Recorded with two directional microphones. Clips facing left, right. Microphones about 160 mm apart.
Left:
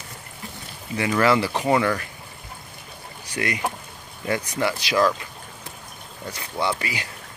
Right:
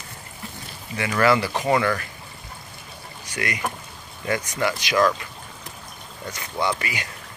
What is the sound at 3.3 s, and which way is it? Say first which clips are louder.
Speech: left 2 dB; 30° left (ahead or behind).